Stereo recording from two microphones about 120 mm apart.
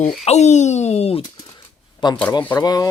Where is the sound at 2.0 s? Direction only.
40° left (ahead or behind).